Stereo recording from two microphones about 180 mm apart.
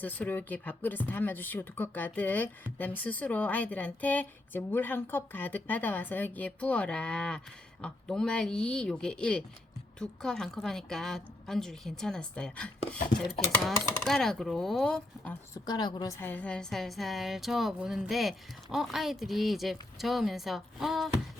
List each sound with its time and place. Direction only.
0.0 s a woman's voice: 10° left (ahead or behind)
15.6 s a woman's voice: 25° left (ahead or behind)
16.2 s a woman's voice: 10° left (ahead or behind)